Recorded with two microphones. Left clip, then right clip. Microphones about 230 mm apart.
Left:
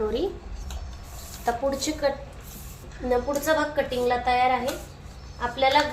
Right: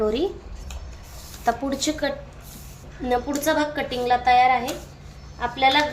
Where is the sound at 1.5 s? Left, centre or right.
Right.